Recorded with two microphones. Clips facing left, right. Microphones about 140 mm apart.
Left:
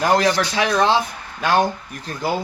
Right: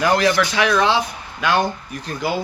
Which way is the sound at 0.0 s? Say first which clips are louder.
Even; 40° left (ahead or behind).